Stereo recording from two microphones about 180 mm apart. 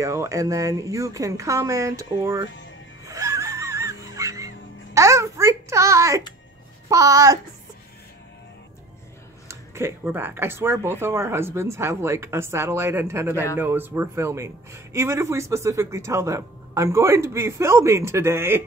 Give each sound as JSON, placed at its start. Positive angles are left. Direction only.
{"t": 0.0, "sound": "a man's voice", "side_deg": -15}
{"t": 3.1, "sound": "music", "side_deg": -15}
{"t": 4.9, "sound": "babbling", "side_deg": -15}
{"t": 6.9, "sound": "speech", "side_deg": -20}
{"t": 9.5, "sound": "a man's voice", "side_deg": -15}